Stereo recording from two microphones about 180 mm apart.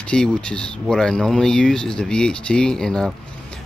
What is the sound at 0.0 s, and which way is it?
Speech, 5° left (ahead or behind).